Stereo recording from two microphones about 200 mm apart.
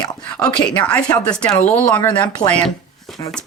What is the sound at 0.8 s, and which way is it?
Speech, 5° left (ahead or behind).